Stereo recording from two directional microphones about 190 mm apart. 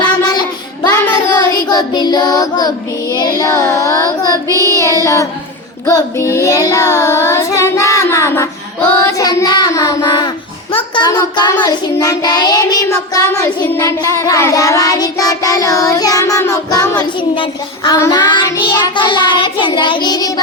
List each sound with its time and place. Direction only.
0.0 s child singing: 20° left (ahead or behind)